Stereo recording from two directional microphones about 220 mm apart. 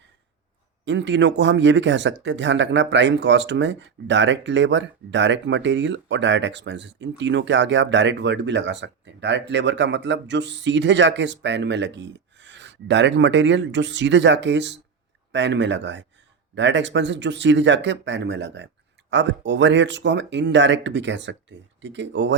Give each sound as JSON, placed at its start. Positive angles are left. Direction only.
{"t": 0.9, "sound": "speech", "side_deg": -55}